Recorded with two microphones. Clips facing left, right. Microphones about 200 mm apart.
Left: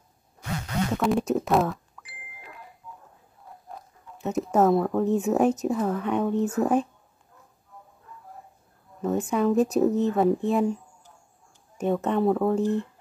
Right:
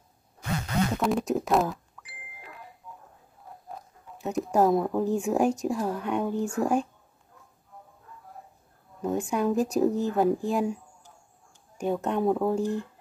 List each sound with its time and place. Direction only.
1.0 s speech: centre (ahead or behind)
4.2 s speech: centre (ahead or behind)
4.6 s speech: 10° right (ahead or behind)
5.0 s speech: centre (ahead or behind)
9.0 s speech: centre (ahead or behind)
11.8 s speech: centre (ahead or behind)